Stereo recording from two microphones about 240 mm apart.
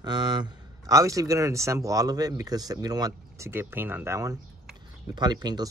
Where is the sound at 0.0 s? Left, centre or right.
Centre.